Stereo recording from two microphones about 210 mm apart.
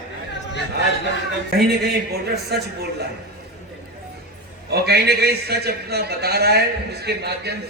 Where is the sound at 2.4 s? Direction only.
50° right (ahead or behind).